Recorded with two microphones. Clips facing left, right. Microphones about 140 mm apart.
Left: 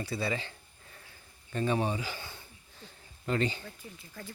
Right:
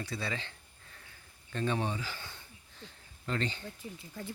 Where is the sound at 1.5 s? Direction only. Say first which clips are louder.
Left 3 dB; 10° left (ahead or behind).